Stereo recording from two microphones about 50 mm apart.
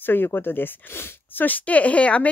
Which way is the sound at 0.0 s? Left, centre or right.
Left.